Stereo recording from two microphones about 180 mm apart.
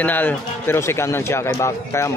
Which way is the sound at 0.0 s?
10° left (ahead or behind).